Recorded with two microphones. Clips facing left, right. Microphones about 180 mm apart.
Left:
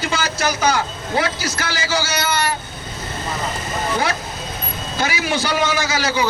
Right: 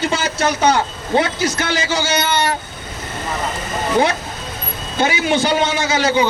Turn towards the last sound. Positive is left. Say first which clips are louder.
# right 4 dB
turn(degrees=-25)  # may be behind; listen again after turning